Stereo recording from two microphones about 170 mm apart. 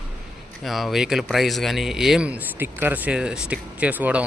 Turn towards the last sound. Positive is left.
turn(degrees=-10)  # may be behind; listen again after turning